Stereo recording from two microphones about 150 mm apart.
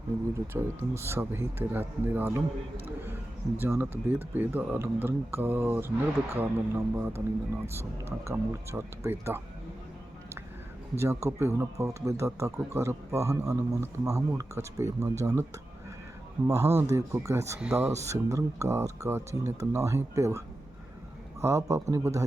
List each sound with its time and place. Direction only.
0.3 s speech: 15° right (ahead or behind)
10.9 s speech: 15° right (ahead or behind)
16.5 s speech: 20° right (ahead or behind)
21.4 s speech: 20° right (ahead or behind)